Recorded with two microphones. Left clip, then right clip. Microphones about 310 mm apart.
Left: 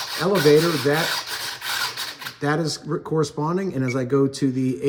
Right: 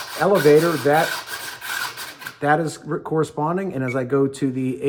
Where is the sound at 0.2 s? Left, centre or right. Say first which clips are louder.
Right 2 dB; centre.